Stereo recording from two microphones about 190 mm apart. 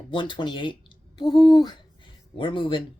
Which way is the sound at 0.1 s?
25° left (ahead or behind).